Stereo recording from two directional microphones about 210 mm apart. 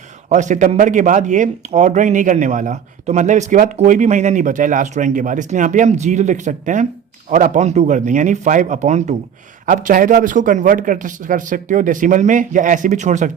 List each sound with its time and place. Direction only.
0.3 s a man's voice: 35° right (ahead or behind)